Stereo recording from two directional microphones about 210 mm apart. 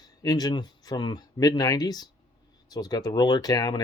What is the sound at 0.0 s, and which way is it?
Speech, 15° left (ahead or behind).